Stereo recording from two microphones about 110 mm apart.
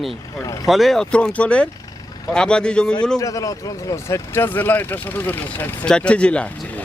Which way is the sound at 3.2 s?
30° left (ahead or behind).